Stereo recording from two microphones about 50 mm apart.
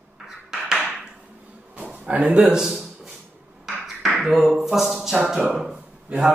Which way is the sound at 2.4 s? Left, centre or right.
Centre.